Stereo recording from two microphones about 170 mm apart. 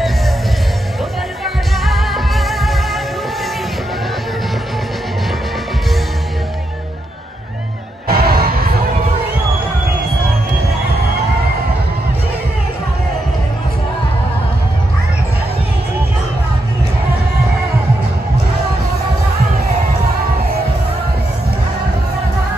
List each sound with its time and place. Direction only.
1.4 s music: centre (ahead or behind)
8.1 s music: 65° right (ahead or behind)